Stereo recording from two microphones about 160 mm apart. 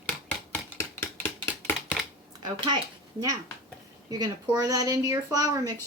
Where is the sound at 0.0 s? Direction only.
15° left (ahead or behind).